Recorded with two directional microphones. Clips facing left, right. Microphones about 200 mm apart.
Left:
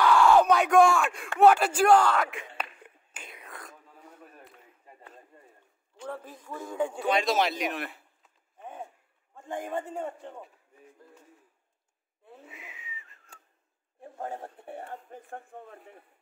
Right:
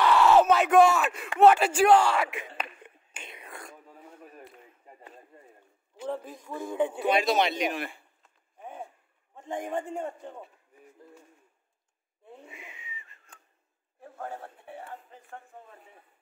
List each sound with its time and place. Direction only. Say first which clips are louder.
0.0 s a sound: even; 5° right (ahead or behind)
6.3 s a man's voice: right 3 dB; 10° right (ahead or behind)
8.5 s a sound: even; 10° right (ahead or behind)
9.5 s a man's voice: right 1 dB; 15° right (ahead or behind)
12.3 s whistling: right 1 dB; centre (ahead or behind)
14.0 s speech: left 2 dB; 20° left (ahead or behind)
14.6 s speech: left 2 dB; 45° left (ahead or behind)